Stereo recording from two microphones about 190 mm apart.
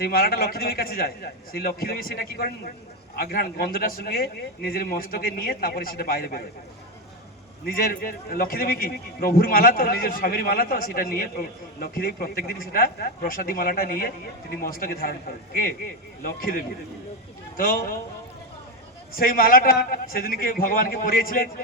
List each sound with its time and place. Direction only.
0.0 s a man's voice: 50° left (ahead or behind)
7.6 s a man's voice: 50° left (ahead or behind)
17.6 s a man's voice: 50° left (ahead or behind)
19.1 s a man's voice: 50° left (ahead or behind)